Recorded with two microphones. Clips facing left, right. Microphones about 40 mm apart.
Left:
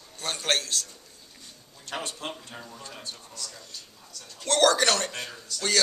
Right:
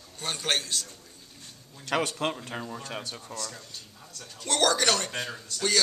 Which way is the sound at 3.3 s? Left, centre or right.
Right.